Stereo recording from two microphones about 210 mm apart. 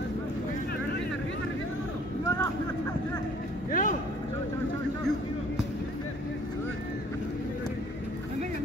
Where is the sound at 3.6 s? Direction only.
40° left (ahead or behind).